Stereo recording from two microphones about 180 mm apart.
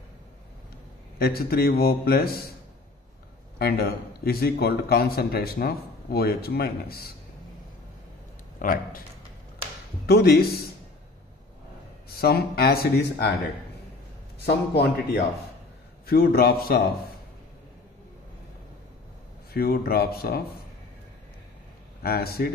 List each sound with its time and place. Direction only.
1.2 s speech: 60° left (ahead or behind)
3.5 s speech: 60° left (ahead or behind)
8.5 s speech: 50° left (ahead or behind)
10.0 s speech: 60° left (ahead or behind)
12.1 s speech: 60° left (ahead or behind)
14.4 s speech: 65° left (ahead or behind)
19.5 s speech: 60° left (ahead or behind)
22.0 s speech: 60° left (ahead or behind)